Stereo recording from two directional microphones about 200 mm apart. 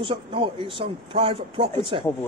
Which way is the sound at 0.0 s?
25° right (ahead or behind).